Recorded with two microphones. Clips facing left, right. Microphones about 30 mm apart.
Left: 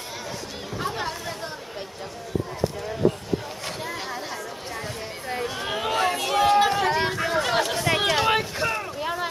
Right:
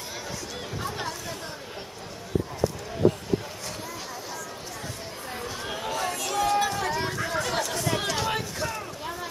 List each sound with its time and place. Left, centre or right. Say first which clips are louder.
0.7 s chatter: left 5 dB; left
5.3 s chatter: left 6 dB; left